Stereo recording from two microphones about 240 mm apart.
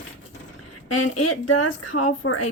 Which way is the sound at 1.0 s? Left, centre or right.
Left.